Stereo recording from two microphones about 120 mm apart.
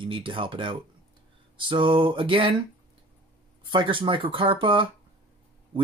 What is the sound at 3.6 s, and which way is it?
Speech, 45° right (ahead or behind).